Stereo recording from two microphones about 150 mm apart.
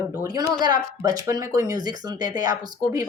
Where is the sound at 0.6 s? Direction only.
25° right (ahead or behind).